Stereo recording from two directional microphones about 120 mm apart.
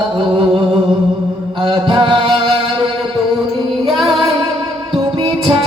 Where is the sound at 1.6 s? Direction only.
45° right (ahead or behind).